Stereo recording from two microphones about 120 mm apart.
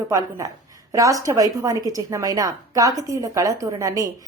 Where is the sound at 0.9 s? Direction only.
30° right (ahead or behind).